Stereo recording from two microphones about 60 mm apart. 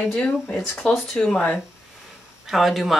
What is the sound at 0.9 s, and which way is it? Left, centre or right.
Speech, centre.